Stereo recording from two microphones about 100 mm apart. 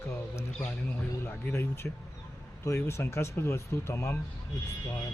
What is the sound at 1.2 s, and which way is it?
Speech, 25° left (ahead or behind).